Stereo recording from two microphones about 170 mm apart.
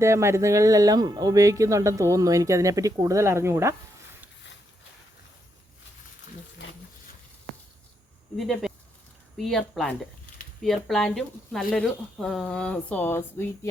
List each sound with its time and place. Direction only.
0.0 s speech: 15° right (ahead or behind)
8.4 s speech: centre (ahead or behind)